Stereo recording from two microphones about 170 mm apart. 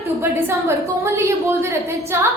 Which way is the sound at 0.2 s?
15° right (ahead or behind).